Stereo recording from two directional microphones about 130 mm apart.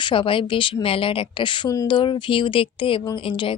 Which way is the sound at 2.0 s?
40° left (ahead or behind).